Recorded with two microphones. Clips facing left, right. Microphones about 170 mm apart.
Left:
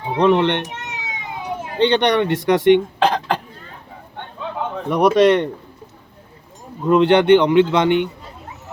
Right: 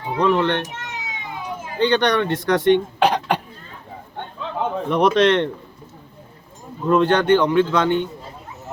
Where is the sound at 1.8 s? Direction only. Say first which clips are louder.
Left 2 dB; 20° left (ahead or behind).